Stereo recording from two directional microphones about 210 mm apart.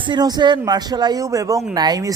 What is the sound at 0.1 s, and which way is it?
A man's voice, 20° right (ahead or behind).